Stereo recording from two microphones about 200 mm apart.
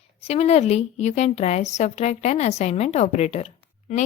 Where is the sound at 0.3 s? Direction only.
30° left (ahead or behind).